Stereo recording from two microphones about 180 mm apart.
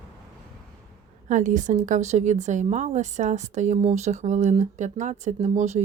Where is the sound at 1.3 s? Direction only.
45° right (ahead or behind).